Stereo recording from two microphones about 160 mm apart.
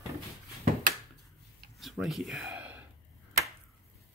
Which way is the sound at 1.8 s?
Centre (ahead or behind).